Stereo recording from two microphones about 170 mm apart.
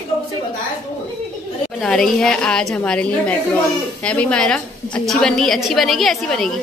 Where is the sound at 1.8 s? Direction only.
5° left (ahead or behind).